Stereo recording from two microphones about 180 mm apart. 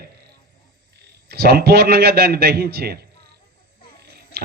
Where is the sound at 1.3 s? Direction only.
65° right (ahead or behind).